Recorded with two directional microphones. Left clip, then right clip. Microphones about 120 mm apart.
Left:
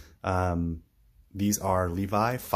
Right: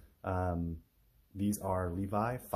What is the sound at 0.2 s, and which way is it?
Speech, 25° left (ahead or behind).